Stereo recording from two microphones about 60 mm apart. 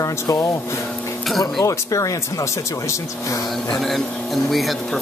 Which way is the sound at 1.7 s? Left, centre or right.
Left.